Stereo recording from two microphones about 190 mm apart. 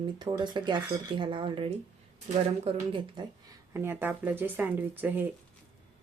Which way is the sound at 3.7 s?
10° right (ahead or behind).